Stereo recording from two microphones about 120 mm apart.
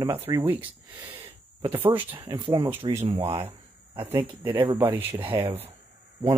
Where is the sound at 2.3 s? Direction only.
35° right (ahead or behind).